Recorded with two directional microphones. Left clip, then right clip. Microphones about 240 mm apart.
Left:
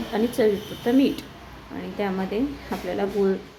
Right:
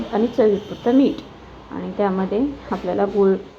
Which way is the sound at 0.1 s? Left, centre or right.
Centre.